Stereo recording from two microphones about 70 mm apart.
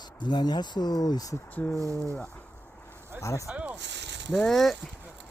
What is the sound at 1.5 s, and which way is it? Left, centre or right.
Speech, left.